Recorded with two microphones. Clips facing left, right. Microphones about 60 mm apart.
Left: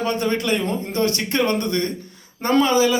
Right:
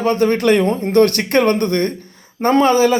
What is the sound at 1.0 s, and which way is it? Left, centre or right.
A man's voice, right.